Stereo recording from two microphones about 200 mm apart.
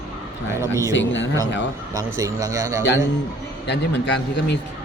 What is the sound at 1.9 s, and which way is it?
Speech, 15° right (ahead or behind).